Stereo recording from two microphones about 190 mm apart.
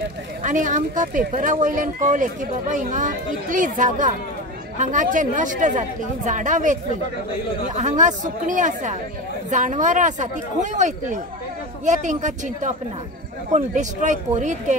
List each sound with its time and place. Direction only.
0.4 s a woman's voice: 45° right (ahead or behind)